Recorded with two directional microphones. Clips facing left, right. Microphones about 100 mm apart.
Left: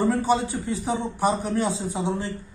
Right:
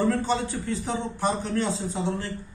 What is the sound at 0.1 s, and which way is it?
A man's voice, 15° left (ahead or behind).